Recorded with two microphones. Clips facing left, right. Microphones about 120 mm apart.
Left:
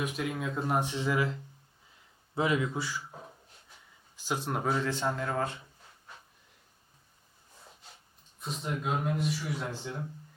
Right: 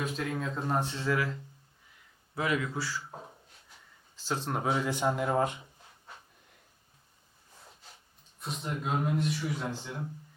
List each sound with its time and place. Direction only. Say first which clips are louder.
0.0 s a man's voice: even; 10° left (ahead or behind)
4.2 s speech: even; 15° left (ahead or behind)
4.5 s speech: right 1 dB; 5° right (ahead or behind)
8.4 s a man's voice: left 1 dB; centre (ahead or behind)